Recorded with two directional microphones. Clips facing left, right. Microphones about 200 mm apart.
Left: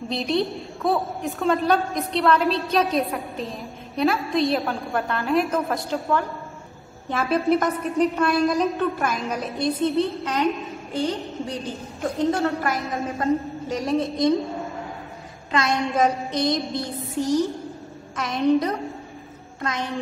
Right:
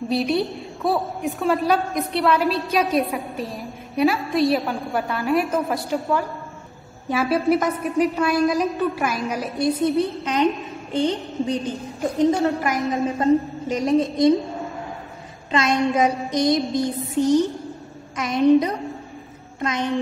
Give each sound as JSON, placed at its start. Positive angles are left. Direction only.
{"t": 0.1, "sound": "a woman's voice", "side_deg": -5}
{"t": 9.8, "sound": "a woman's voice", "side_deg": -15}
{"t": 15.5, "sound": "a woman's voice", "side_deg": -20}